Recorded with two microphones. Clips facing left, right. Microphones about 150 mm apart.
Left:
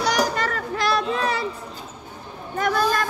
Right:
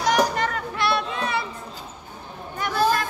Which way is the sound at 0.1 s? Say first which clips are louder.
Right 1 dB; 35° left (ahead or behind).